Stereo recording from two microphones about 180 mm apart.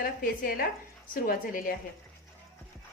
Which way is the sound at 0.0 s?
55° left (ahead or behind).